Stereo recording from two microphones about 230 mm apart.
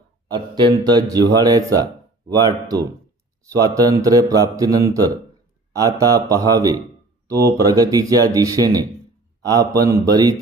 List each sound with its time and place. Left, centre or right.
0.3 s speech: centre